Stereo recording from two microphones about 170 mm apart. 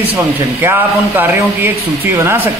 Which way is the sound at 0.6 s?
10° right (ahead or behind).